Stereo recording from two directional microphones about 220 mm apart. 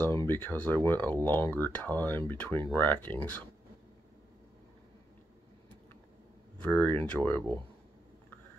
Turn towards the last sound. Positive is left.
turn(degrees=10)  # may be behind; listen again after turning